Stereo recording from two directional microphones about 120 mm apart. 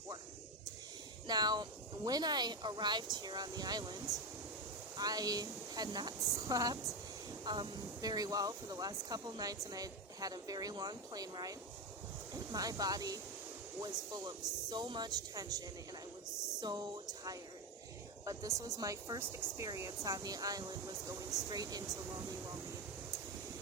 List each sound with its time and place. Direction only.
1.3 s speech: 35° right (ahead or behind)
4.9 s speech: 30° right (ahead or behind)